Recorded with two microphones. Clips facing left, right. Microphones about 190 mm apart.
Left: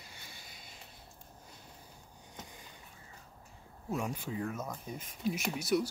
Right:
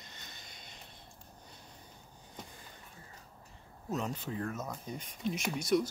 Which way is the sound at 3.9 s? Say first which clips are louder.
Even; 10° left (ahead or behind).